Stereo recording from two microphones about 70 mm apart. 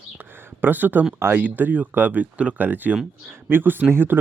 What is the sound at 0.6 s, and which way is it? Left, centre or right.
Speech, right.